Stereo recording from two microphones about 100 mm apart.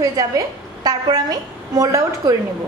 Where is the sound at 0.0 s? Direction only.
35° right (ahead or behind).